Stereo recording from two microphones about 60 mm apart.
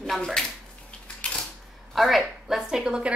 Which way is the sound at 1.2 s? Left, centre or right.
Centre.